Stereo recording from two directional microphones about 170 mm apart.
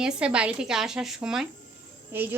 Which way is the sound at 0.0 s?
5° right (ahead or behind).